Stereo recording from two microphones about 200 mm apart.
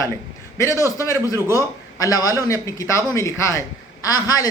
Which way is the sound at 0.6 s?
15° left (ahead or behind).